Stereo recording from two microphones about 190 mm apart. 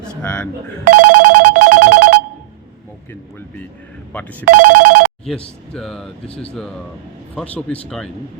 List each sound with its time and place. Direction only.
0.0 s telephone dialing: 5° left (ahead or behind)
0.9 s telephone bell ringing: 45° right (ahead or behind)
4.1 s speech: 10° left (ahead or behind)
4.4 s speech: 45° right (ahead or behind)
5.2 s speech: 5° left (ahead or behind)